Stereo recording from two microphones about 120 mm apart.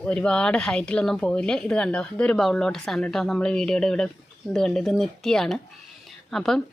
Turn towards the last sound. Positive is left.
turn(degrees=5)  # may be behind; listen again after turning